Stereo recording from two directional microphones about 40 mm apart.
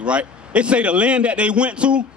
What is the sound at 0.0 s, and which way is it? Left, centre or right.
A man's voice, right.